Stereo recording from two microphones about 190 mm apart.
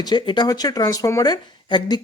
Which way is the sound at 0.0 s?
20° left (ahead or behind).